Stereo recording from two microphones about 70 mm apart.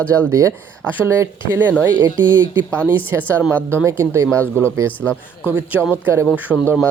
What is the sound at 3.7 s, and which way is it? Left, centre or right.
Speech, right.